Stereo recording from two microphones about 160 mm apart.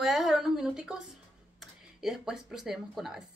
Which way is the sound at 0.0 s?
Centre (ahead or behind).